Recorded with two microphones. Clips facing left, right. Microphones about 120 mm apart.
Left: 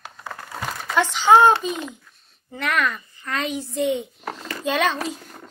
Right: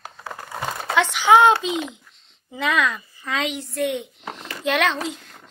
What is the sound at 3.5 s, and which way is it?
Speech, 15° left (ahead or behind).